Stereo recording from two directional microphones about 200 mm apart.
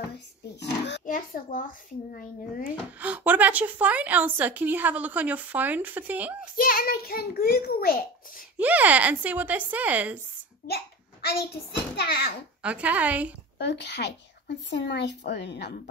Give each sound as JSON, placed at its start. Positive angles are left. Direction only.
{"t": 0.6, "sound": "speech", "side_deg": 60}
{"t": 1.0, "sound": "a child's voice", "side_deg": 40}
{"t": 3.0, "sound": "a woman's voice", "side_deg": -10}
{"t": 6.5, "sound": "a child's voice", "side_deg": 45}
{"t": 8.5, "sound": "a woman's voice", "side_deg": -10}
{"t": 10.7, "sound": "hands", "side_deg": 50}
{"t": 12.0, "sound": "a child's voice", "side_deg": 55}
{"t": 12.6, "sound": "a woman's voice", "side_deg": -5}
{"t": 13.6, "sound": "speech", "side_deg": 60}